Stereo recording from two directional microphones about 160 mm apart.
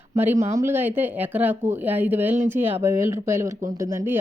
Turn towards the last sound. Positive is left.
turn(degrees=-15)  # may be behind; listen again after turning